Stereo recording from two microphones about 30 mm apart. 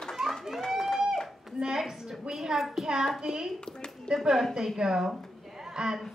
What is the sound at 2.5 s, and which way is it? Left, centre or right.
Speech, centre.